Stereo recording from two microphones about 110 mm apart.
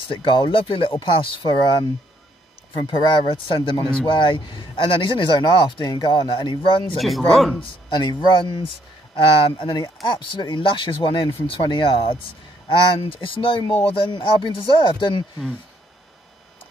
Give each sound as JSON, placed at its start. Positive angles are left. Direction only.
{"t": 0.1, "sound": "speech", "side_deg": 50}
{"t": 7.0, "sound": "speech", "side_deg": 0}
{"t": 7.6, "sound": "speech", "side_deg": 45}